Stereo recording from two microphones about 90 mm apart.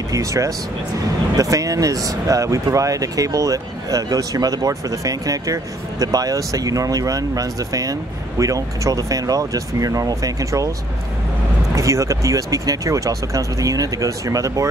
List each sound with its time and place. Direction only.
0.1 s speech: 35° right (ahead or behind)
11.7 s speech: 35° right (ahead or behind)